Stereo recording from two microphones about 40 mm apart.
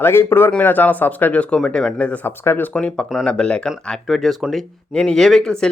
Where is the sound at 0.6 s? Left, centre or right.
Left.